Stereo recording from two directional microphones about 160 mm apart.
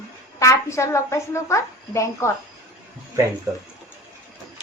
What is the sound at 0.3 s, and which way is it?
A woman's voice, 20° left (ahead or behind).